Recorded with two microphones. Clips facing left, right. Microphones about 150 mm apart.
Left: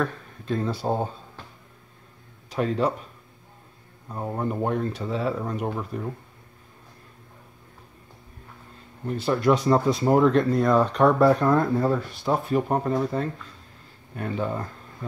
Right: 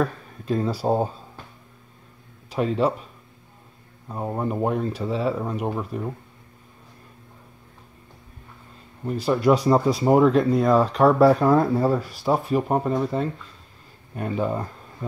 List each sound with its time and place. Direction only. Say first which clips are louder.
0.0 s speech: right 3 dB; 10° right (ahead or behind)
2.5 s speech: right 2 dB; 5° right (ahead or behind)
4.1 s speech: right 2 dB; 10° right (ahead or behind)
9.2 s speech: right 2 dB; 10° right (ahead or behind)
14.1 s speech: right 3 dB; 20° right (ahead or behind)